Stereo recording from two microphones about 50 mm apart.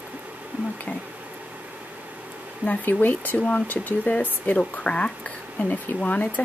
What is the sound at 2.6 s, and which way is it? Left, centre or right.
Speech, left.